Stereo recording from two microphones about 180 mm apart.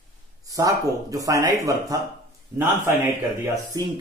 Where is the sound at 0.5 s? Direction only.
20° right (ahead or behind).